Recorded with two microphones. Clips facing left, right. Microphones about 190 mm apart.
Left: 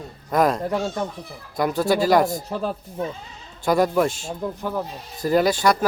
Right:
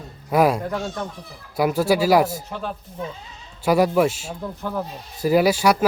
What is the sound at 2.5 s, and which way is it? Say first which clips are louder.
Speech: left 4 dB; 35° left (ahead or behind).